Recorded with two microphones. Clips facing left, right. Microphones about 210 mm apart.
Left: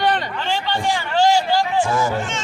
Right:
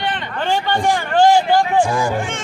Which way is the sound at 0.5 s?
50° right (ahead or behind).